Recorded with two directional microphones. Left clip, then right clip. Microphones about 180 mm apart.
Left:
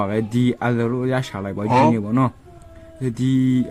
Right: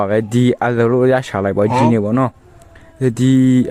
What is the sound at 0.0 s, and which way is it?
Speech, 40° right (ahead or behind).